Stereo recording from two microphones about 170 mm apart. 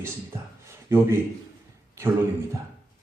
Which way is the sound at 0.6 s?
15° right (ahead or behind).